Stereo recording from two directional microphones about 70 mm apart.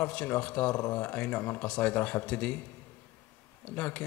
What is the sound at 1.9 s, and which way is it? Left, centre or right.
Speech, left.